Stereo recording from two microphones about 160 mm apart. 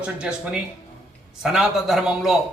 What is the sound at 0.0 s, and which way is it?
A man's voice, 5° right (ahead or behind).